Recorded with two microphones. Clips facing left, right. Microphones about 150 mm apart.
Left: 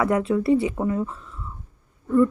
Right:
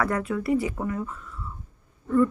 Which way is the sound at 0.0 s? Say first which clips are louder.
Left 5 dB; 25° left (ahead or behind).